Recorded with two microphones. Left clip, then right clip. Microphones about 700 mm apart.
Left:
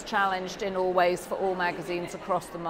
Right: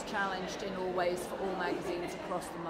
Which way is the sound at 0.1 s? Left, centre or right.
Left.